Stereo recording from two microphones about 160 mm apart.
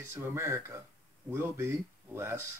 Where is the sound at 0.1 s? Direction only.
15° right (ahead or behind).